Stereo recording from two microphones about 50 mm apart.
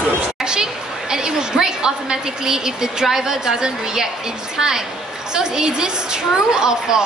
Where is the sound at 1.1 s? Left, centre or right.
Centre.